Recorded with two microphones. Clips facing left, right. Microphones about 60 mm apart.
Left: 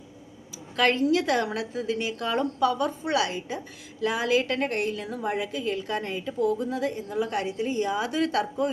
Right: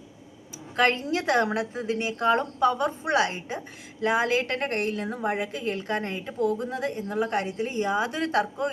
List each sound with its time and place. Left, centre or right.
0.8 s a woman's voice: right